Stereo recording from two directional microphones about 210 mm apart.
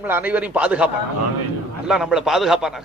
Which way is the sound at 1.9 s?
5° right (ahead or behind).